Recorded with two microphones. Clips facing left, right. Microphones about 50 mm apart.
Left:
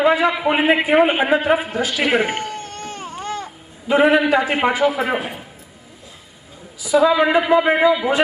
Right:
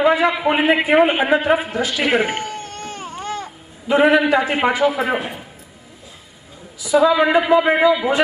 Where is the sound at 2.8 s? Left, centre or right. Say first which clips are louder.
Even; centre.